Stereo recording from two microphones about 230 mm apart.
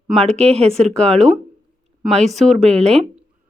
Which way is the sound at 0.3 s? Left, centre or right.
Right.